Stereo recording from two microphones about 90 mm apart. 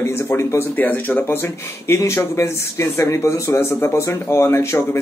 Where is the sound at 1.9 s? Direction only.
30° left (ahead or behind).